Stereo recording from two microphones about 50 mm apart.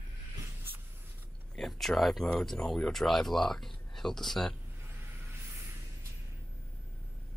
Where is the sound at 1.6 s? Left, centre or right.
Centre.